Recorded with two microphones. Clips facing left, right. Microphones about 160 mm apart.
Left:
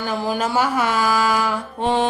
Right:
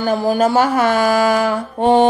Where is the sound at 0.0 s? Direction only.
45° right (ahead or behind).